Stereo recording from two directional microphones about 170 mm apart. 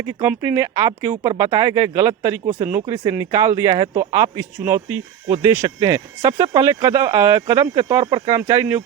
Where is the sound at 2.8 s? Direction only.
25° right (ahead or behind).